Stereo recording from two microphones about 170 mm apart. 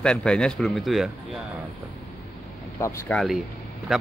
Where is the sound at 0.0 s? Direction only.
5° left (ahead or behind).